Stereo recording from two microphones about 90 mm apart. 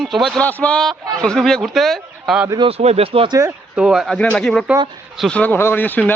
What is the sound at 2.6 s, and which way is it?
Speech, 90° right.